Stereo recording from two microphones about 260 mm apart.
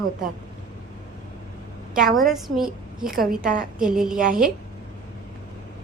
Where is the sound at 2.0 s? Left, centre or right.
Centre.